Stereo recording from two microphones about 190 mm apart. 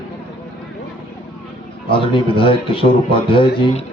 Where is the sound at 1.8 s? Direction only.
25° left (ahead or behind).